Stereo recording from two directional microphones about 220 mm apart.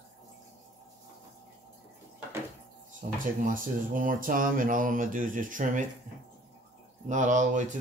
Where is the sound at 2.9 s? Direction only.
35° right (ahead or behind).